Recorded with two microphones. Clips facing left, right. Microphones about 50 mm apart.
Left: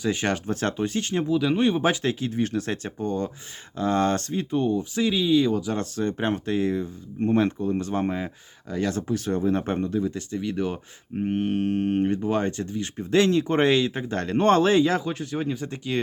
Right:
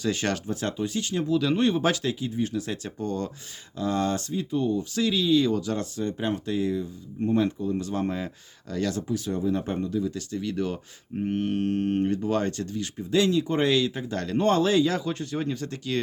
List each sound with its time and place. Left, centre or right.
0.0 s speech: centre
0.4 s speech: left
1.2 s speech: centre
2.2 s speech: left
3.0 s speech: centre
3.8 s speech: left
4.8 s speech: centre
5.8 s speech: left
6.1 s speech: left
8.0 s speech: left
8.9 s speech: left
10.2 s speech: left
13.0 s speech: left
15.1 s speech: centre